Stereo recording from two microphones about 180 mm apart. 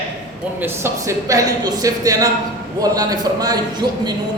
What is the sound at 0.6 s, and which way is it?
A man's voice, 15° right (ahead or behind).